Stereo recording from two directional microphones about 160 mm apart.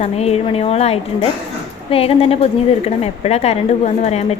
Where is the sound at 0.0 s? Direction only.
40° left (ahead or behind).